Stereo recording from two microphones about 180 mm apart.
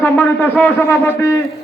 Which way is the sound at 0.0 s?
10° left (ahead or behind).